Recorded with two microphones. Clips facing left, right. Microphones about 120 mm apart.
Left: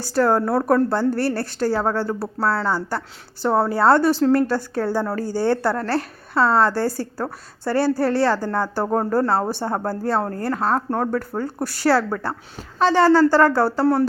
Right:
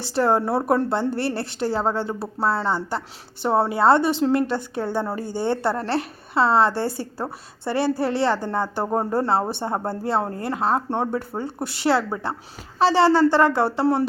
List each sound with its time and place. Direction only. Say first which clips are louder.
0.1 s a woman's voice: left 2 dB; 20° right (ahead or behind)
8.8 s speech: left 3 dB; 10° right (ahead or behind)
9.0 s a woman's voice: left 2 dB; 20° right (ahead or behind)